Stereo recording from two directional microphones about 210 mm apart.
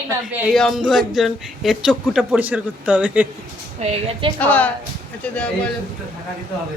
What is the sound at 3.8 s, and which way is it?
Speech, 30° right (ahead or behind).